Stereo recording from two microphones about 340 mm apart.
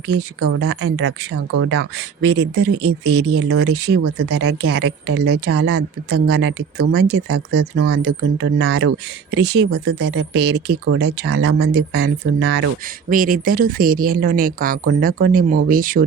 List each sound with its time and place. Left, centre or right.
0.1 s speech: right